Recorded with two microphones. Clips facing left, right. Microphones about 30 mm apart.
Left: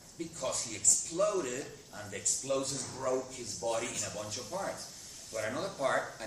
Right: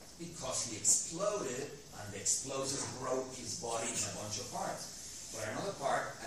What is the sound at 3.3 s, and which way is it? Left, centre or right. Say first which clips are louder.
Speech: left 3 dB; left.